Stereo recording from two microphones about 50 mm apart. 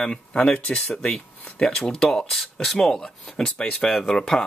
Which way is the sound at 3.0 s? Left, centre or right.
Centre.